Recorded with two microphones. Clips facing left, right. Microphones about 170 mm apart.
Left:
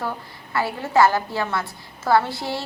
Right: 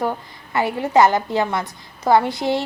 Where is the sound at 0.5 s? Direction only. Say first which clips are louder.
Right 4 dB; 20° right (ahead or behind).